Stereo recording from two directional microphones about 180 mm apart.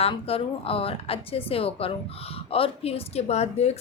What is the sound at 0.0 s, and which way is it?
A woman's voice, 30° left (ahead or behind).